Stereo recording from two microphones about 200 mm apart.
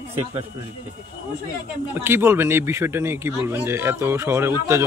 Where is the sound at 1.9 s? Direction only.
10° right (ahead or behind).